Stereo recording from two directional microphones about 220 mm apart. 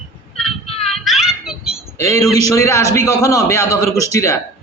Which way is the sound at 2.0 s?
15° left (ahead or behind).